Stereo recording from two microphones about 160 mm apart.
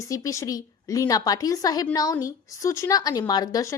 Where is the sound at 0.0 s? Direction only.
20° left (ahead or behind).